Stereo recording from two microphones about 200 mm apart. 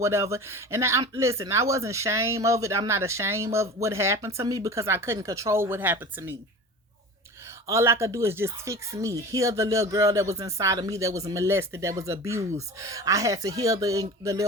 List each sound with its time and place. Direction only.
0.0 s speech: 15° right (ahead or behind)
7.7 s speech: 15° right (ahead or behind)